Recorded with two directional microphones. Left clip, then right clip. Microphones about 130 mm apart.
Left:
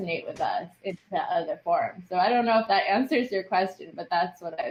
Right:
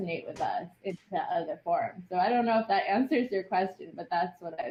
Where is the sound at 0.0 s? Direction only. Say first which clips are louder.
Left 4 dB; 35° left (ahead or behind).